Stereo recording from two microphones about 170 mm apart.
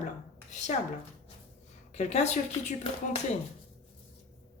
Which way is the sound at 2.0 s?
40° left (ahead or behind).